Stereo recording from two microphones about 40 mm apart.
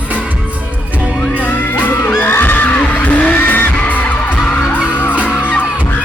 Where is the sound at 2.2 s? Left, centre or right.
Left.